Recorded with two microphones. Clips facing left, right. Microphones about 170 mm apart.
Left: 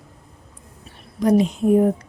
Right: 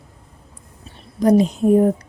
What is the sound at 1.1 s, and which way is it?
Speech, 35° right (ahead or behind).